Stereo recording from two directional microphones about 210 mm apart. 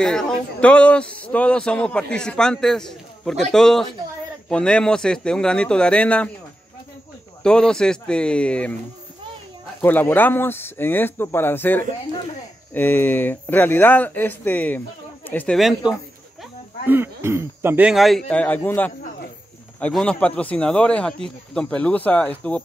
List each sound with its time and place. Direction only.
0.0 s speech: 5° left (ahead or behind)
7.4 s speech: 5° left (ahead or behind)
9.8 s speech: 10° left (ahead or behind)